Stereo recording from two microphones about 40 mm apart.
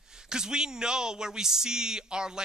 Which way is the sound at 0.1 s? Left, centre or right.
Centre.